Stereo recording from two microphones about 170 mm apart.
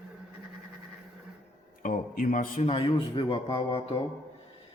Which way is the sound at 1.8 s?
50° left (ahead or behind).